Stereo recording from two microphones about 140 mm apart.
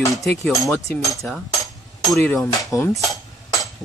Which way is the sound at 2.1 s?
10° left (ahead or behind).